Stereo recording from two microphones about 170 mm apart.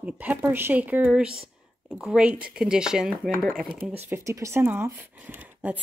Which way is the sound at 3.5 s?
55° right (ahead or behind).